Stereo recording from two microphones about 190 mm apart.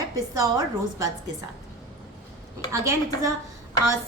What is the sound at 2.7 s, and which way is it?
Speech, 15° right (ahead or behind).